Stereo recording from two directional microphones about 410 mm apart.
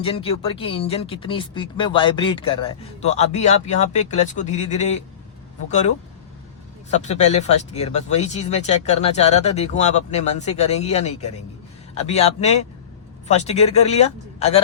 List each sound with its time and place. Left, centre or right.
0.0 s speech: centre
6.9 s speech: centre